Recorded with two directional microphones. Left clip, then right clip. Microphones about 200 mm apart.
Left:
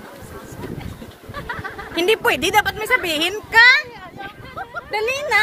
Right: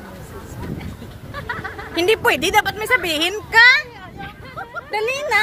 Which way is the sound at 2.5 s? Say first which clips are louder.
Even; 10° right (ahead or behind).